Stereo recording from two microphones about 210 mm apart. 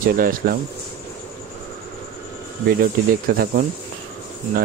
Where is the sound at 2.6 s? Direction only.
45° right (ahead or behind).